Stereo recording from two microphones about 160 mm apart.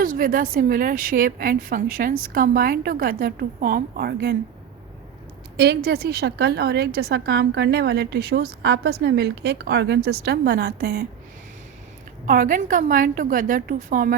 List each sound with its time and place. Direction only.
0.0 s a woman's voice: 60° right (ahead or behind); by 4.4 s 75° right (ahead or behind)
5.5 s a woman's voice: 80° right
12.2 s a woman's voice: 55° right (ahead or behind)